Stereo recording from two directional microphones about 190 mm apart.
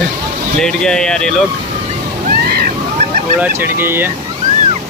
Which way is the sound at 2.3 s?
55° right (ahead or behind).